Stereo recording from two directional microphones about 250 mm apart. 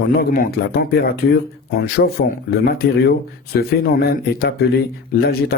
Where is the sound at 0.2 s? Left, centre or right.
Left.